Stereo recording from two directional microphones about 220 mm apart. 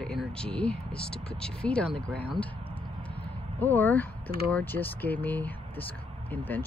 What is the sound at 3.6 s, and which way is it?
Speech, 10° left (ahead or behind).